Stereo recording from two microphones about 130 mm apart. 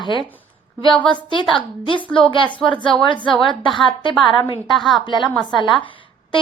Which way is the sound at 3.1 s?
40° left (ahead or behind).